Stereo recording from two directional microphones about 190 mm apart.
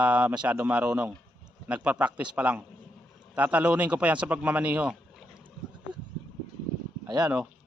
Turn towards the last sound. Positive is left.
turn(degrees=-20)  # may be behind; listen again after turning